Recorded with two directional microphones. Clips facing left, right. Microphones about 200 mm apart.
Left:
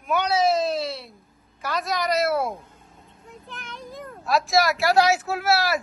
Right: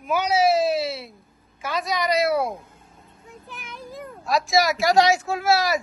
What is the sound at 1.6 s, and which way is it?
A woman's voice, centre (ahead or behind).